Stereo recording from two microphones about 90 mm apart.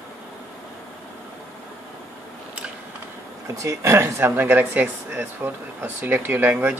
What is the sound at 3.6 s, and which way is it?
Speech, 35° right (ahead or behind).